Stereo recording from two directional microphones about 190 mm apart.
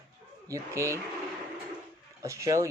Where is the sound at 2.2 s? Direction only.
15° right (ahead or behind).